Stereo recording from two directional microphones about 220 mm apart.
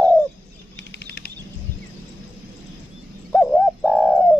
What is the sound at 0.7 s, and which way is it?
Bird flight, 50° left (ahead or behind).